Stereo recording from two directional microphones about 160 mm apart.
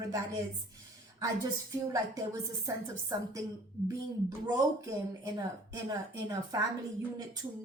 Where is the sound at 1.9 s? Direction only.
20° right (ahead or behind).